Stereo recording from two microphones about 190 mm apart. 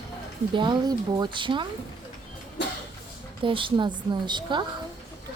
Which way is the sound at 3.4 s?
25° right (ahead or behind).